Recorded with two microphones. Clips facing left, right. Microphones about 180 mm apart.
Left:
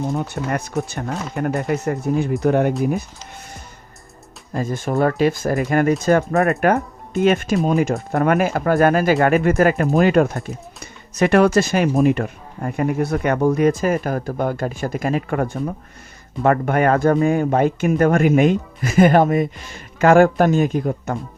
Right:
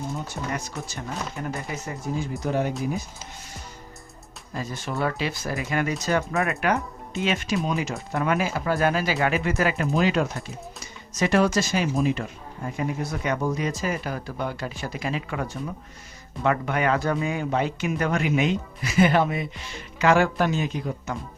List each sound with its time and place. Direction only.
0.1 s speech: 60° left (ahead or behind)
4.5 s speech: 50° left (ahead or behind)